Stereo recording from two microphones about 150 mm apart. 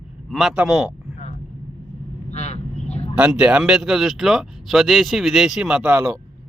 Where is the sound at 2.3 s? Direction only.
50° left (ahead or behind).